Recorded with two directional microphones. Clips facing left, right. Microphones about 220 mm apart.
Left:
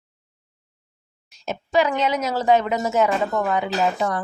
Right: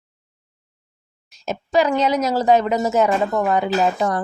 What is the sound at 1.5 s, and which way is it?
A woman's voice, 40° right (ahead or behind).